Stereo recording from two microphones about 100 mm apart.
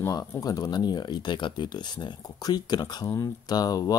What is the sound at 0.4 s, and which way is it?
Speech, 40° left (ahead or behind).